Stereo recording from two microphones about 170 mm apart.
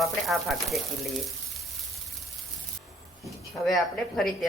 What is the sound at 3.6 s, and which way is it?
Speech, centre (ahead or behind).